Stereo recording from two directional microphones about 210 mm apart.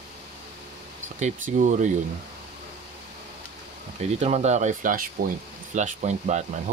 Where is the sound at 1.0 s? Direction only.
35° right (ahead or behind).